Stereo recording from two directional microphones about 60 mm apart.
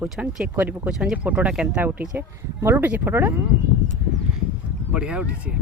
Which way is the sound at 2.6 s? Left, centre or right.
Right.